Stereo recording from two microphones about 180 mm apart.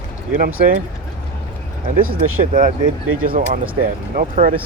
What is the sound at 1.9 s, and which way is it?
Speech, 50° right (ahead or behind).